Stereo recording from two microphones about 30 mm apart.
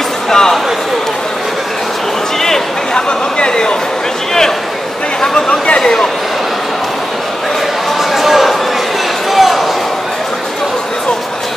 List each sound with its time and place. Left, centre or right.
0.3 s speech: centre
2.9 s speech: left
5.8 s speech: centre
8.1 s a sound: centre